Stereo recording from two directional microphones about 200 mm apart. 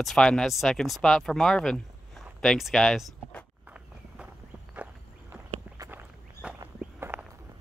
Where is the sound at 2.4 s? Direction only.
Centre (ahead or behind).